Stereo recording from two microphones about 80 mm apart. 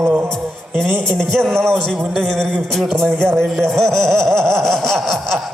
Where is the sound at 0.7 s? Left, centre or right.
Centre.